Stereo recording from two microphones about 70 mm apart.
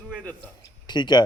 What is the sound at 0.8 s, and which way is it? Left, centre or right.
Speech, left.